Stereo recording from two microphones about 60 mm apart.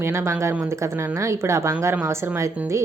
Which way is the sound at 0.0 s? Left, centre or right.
Right.